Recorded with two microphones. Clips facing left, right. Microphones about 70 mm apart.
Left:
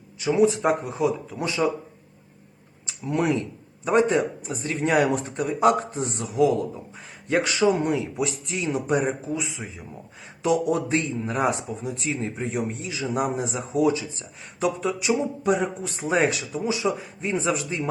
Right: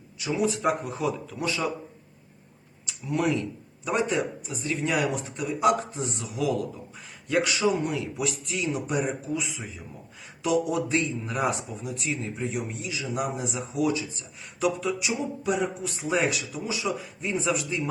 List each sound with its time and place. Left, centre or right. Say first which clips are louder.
0.2 s speech: left 6 dB; left
2.8 s speech: left 3 dB; left
7.9 s speech: left 3 dB; left
10.4 s speech: left 3 dB; left